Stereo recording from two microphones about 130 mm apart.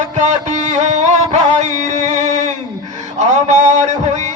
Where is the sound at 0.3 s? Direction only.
65° right (ahead or behind).